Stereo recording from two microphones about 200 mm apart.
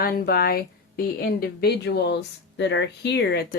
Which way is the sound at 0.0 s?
45° left (ahead or behind).